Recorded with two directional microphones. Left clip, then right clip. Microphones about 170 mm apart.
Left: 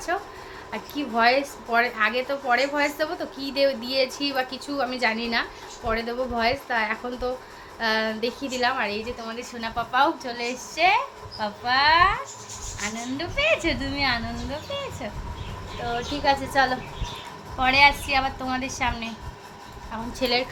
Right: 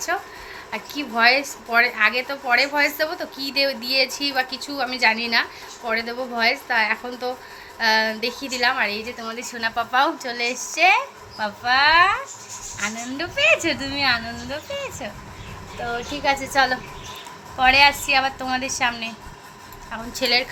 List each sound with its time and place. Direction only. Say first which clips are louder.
0.1 s a woman's voice: right 2 dB; 10° left (ahead or behind)
9.0 s a woman's voice: right 2 dB; 15° right (ahead or behind)
17.6 s a woman's voice: right 3 dB; 20° right (ahead or behind)
20.1 s a woman's voice: right 4 dB; 10° left (ahead or behind)